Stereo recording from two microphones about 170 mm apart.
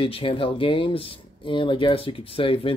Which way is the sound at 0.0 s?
30° left (ahead or behind).